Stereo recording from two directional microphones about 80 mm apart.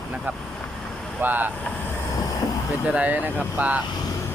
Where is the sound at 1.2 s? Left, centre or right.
Right.